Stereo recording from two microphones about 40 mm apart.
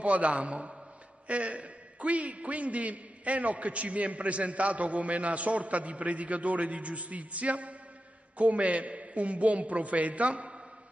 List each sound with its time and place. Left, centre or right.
0.0 s a man's voice: right